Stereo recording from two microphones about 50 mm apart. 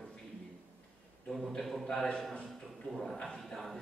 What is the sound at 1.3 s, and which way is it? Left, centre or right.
A man's voice, centre.